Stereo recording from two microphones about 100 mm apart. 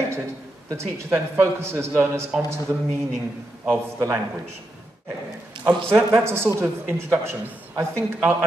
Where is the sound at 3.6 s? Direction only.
20° right (ahead or behind).